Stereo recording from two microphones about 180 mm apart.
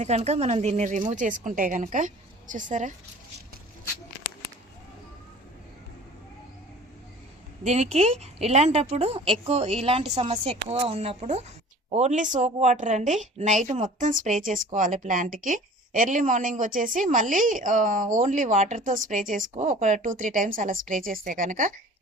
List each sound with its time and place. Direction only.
0.0 s speech: 40° right (ahead or behind)
7.6 s a woman's voice: 40° right (ahead or behind)